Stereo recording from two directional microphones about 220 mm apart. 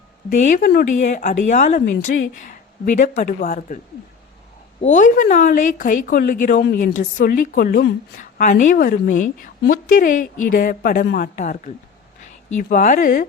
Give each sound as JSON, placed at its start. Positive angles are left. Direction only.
{"t": 0.3, "sound": "speech", "side_deg": 35}
{"t": 4.8, "sound": "speech", "side_deg": 35}
{"t": 11.3, "sound": "speech", "side_deg": 35}